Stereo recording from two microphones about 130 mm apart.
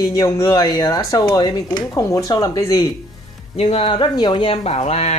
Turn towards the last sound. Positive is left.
turn(degrees=55)  # may be behind; listen again after turning